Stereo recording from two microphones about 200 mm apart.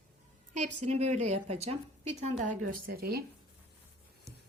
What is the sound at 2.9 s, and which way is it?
Speech, 50° right (ahead or behind).